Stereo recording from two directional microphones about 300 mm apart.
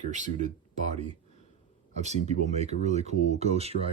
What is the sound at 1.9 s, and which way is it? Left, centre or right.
Speech, right.